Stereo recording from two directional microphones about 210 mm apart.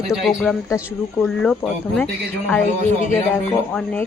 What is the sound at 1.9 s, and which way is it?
Speech, 5° left (ahead or behind).